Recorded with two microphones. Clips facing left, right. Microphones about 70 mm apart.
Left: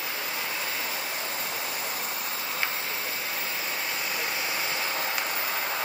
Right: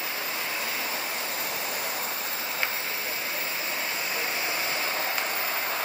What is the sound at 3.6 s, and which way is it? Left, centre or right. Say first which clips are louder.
Vehicle: even; right.